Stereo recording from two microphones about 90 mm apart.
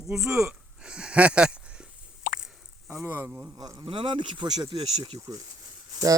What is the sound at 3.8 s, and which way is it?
Speech, 70° right (ahead or behind).